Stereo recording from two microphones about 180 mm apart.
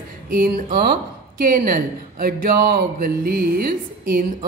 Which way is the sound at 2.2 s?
55° right (ahead or behind).